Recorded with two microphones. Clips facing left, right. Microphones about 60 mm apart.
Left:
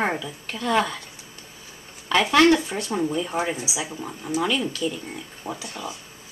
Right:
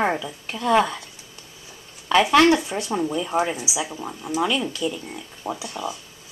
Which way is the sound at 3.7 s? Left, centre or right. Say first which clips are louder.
Right 2 dB; centre.